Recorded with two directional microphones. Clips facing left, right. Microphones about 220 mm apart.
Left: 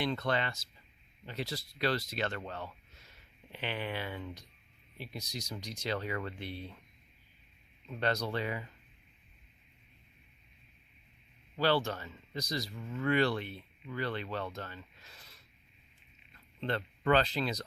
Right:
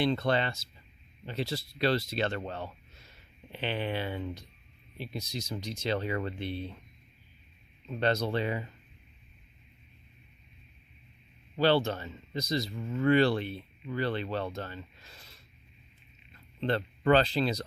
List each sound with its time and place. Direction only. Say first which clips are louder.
0.0 s speech: right 5 dB; 30° right (ahead or behind)
7.9 s speech: right 5 dB; 25° right (ahead or behind)
11.5 s speech: right 4 dB; 25° right (ahead or behind)
16.6 s speech: right 5 dB; 30° right (ahead or behind)